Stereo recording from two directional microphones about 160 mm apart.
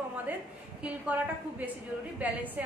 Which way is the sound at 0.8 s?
10° right (ahead or behind).